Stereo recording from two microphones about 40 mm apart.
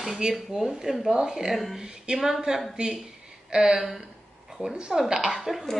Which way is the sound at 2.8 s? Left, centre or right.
Right.